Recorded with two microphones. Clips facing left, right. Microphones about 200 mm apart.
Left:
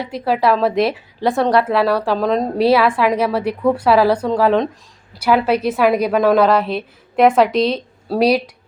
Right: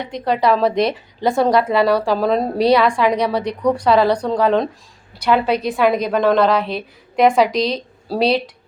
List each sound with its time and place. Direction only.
0.0 s a woman's voice: 5° left (ahead or behind)